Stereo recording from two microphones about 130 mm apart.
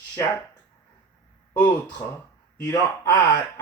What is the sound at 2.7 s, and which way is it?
Speech, 25° left (ahead or behind).